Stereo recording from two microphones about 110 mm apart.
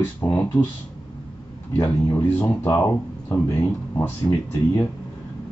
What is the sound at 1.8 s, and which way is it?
Speech, 20° left (ahead or behind).